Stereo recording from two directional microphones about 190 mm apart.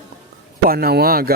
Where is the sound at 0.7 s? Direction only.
55° right (ahead or behind).